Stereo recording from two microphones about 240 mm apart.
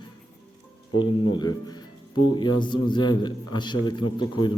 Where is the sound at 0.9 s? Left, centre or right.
Centre.